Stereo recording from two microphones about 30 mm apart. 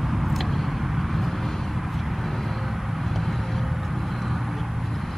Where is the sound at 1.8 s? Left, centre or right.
Centre.